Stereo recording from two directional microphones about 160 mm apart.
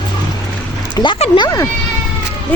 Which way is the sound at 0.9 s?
30° left (ahead or behind).